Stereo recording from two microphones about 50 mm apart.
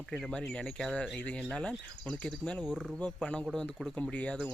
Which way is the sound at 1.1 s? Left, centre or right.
Left.